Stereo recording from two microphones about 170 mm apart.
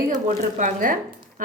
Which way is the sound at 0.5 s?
50° right (ahead or behind).